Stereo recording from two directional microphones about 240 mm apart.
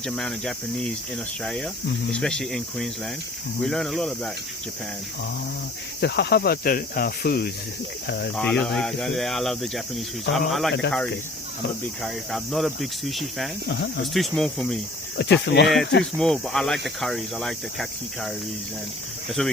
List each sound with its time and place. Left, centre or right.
0.0 s speech: centre
6.0 s cricket: left
8.0 s speech: left
8.4 s speech: centre
12.0 s speech: centre
13.7 s speech: left
14.1 s speech: centre
15.2 s speech: left
15.6 s speech: centre
19.4 s speech: centre